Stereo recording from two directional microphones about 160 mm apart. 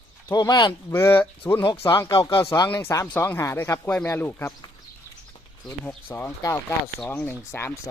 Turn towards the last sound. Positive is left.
turn(degrees=15)  # may be behind; listen again after turning